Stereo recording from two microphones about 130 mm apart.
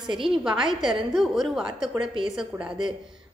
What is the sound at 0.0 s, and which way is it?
Speech, 40° right (ahead or behind).